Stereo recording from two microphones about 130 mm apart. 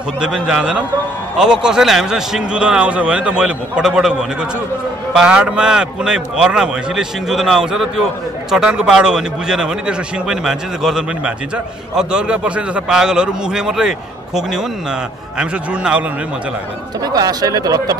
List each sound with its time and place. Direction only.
0.2 s a man's voice: 5° right (ahead or behind)
17.0 s speech: 30° right (ahead or behind)